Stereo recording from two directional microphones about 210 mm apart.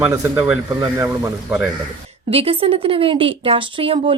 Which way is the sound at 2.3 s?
25° right (ahead or behind).